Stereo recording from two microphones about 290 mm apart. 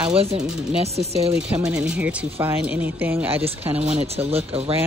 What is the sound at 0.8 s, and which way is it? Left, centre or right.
Speech, right.